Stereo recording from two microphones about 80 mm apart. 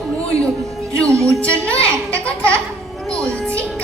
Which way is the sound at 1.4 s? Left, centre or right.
Centre.